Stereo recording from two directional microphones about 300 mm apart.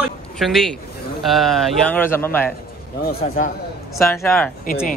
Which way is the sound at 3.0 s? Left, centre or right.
Left.